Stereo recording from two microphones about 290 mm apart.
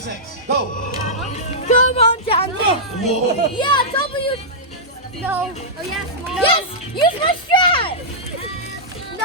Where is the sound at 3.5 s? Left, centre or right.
Centre.